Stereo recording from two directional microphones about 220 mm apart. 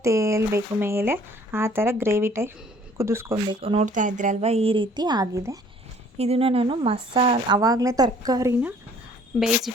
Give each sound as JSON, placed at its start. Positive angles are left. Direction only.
{"t": 0.0, "sound": "speech", "side_deg": -15}
{"t": 6.1, "sound": "speech", "side_deg": -25}
{"t": 9.7, "sound": "speech", "side_deg": 0}